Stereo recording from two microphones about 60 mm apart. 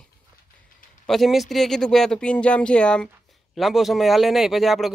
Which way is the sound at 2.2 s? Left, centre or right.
Centre.